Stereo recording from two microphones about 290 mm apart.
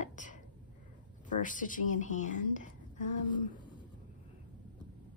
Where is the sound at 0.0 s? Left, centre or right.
Left.